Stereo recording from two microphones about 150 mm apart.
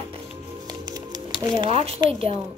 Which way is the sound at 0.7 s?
25° right (ahead or behind).